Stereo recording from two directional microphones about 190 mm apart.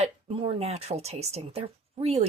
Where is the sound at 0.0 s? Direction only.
35° right (ahead or behind).